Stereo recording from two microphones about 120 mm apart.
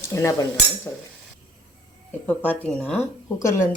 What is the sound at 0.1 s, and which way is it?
Speech, 25° left (ahead or behind).